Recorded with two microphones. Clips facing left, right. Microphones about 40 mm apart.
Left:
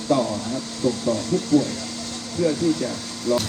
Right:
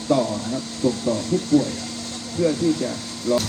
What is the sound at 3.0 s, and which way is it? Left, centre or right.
Air conditioning, left.